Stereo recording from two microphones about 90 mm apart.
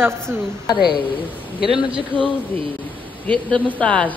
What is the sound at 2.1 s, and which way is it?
A woman's voice, 20° left (ahead or behind).